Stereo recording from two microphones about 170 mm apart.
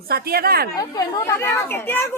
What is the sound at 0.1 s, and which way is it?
Speech, 65° right (ahead or behind).